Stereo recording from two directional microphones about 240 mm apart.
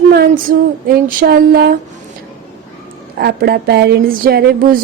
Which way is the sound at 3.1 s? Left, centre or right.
Right.